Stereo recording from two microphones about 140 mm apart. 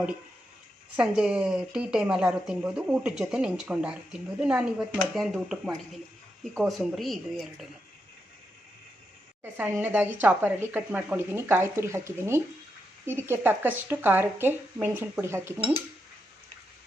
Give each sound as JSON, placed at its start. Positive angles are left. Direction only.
{"t": 0.9, "sound": "a woman's voice", "side_deg": -5}
{"t": 9.4, "sound": "speech", "side_deg": -15}